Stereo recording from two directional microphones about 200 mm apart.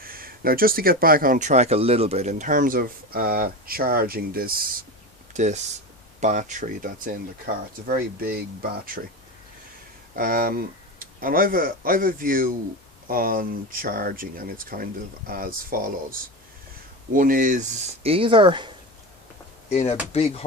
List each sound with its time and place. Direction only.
0.0 s speech: 45° right (ahead or behind)
10.2 s speech: 45° right (ahead or behind)
17.2 s speech: 45° right (ahead or behind)
18.0 s speech: 25° right (ahead or behind)
19.7 s speech: 30° left (ahead or behind)